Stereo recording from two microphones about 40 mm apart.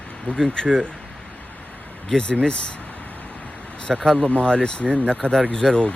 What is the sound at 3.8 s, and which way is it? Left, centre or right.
Speech, centre.